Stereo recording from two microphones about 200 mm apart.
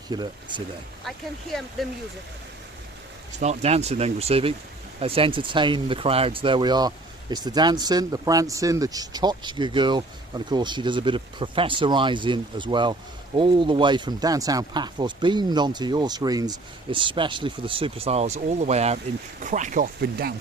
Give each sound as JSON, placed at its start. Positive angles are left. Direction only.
{"t": 0.1, "sound": "speech", "side_deg": -20}
{"t": 1.8, "sound": "speech", "side_deg": 0}
{"t": 3.3, "sound": "speech", "side_deg": -35}